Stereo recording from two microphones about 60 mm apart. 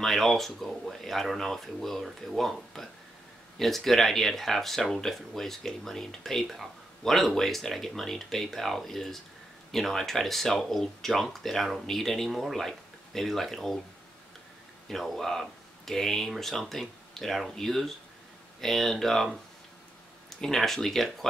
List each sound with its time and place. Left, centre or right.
0.0 s speech: centre
14.9 s speech: centre
20.3 s speech: centre